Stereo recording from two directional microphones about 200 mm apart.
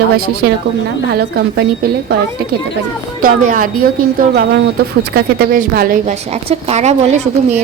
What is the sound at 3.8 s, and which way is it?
Speech, 50° right (ahead or behind).